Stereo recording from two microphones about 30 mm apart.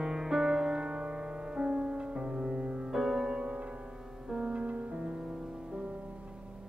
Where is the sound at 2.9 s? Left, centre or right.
Centre.